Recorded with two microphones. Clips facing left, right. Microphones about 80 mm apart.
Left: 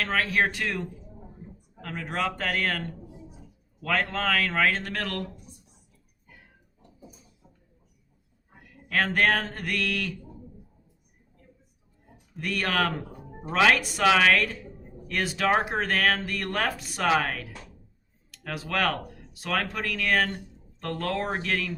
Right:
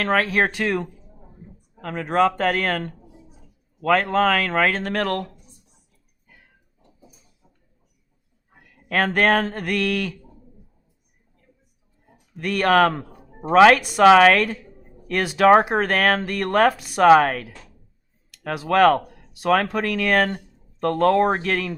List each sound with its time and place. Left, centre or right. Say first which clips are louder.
0.0 s speech: right 5 dB; right
3.8 s speech: right 9 dB; right
8.9 s speech: right 5 dB; right
12.4 s a woman's voice: right 10 dB; right
17.0 s a woman's voice: right 11 dB; right
18.5 s a woman's voice: right 11 dB; right